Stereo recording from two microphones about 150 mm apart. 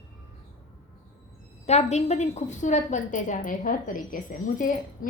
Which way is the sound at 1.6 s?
45° left (ahead or behind).